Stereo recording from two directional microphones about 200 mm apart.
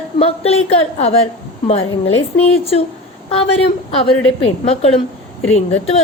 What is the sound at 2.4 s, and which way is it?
Speech, 30° left (ahead or behind).